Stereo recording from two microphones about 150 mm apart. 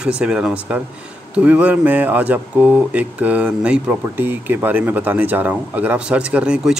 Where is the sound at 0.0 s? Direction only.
5° right (ahead or behind).